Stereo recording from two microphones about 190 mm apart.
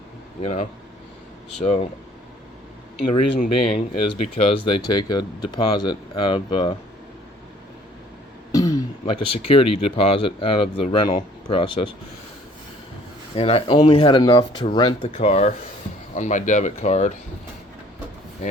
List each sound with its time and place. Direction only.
0.4 s speech: 35° left (ahead or behind)
3.1 s speech: 35° left (ahead or behind)
8.5 s speech: 20° left (ahead or behind)
13.3 s speech: 30° left (ahead or behind)